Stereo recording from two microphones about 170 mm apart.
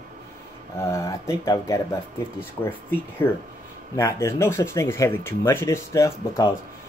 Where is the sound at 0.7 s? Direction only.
15° left (ahead or behind).